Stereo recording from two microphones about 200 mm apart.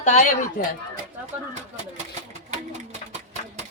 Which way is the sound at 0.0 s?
35° left (ahead or behind).